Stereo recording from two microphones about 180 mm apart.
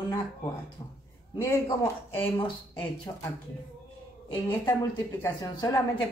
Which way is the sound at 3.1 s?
20° left (ahead or behind).